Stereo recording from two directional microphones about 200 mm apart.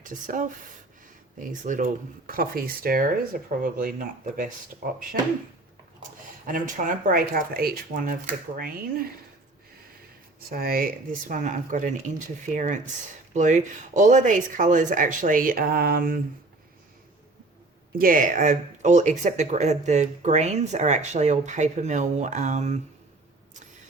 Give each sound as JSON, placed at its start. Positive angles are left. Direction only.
{"t": 0.0, "sound": "speech", "side_deg": -40}
{"t": 6.4, "sound": "speech", "side_deg": -40}
{"t": 10.5, "sound": "speech", "side_deg": -45}
{"t": 17.9, "sound": "speech", "side_deg": -45}